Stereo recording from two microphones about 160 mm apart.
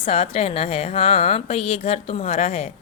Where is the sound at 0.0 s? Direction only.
35° left (ahead or behind).